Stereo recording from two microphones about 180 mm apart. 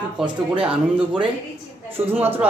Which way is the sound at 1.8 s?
10° right (ahead or behind).